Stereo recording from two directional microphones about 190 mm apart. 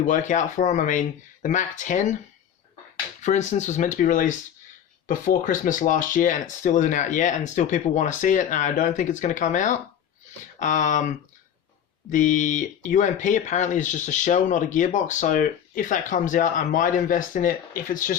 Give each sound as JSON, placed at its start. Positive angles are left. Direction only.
{"t": 0.0, "sound": "speech", "side_deg": 40}
{"t": 3.2, "sound": "speech", "side_deg": 40}